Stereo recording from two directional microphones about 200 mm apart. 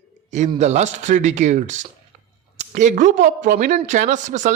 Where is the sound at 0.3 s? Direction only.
35° right (ahead or behind).